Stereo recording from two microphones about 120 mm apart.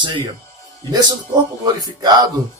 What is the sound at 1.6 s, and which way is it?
Speech, 35° right (ahead or behind).